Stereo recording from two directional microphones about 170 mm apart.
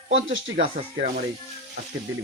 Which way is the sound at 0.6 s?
55° right (ahead or behind).